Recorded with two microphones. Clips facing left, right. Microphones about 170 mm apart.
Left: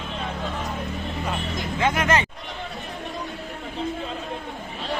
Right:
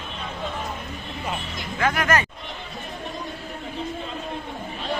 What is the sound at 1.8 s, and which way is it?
Speech, 20° left (ahead or behind).